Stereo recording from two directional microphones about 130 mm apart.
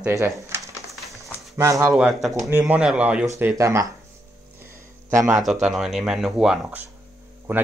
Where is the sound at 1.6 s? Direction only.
25° right (ahead or behind).